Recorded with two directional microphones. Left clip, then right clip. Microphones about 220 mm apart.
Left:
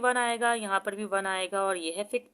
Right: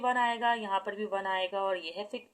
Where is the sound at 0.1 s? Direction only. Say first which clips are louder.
Left 2 dB; 50° left (ahead or behind).